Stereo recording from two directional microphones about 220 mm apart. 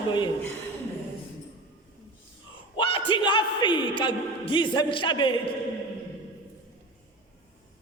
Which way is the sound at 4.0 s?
20° left (ahead or behind).